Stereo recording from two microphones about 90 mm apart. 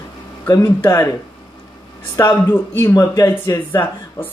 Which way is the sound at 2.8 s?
40° left (ahead or behind).